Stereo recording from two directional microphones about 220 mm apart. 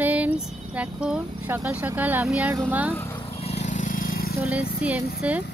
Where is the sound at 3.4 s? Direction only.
30° left (ahead or behind).